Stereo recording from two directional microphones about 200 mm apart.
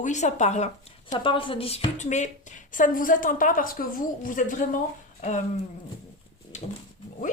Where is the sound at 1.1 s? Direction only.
25° left (ahead or behind).